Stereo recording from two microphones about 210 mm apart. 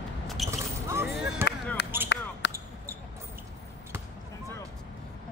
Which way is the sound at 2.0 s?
55° left (ahead or behind).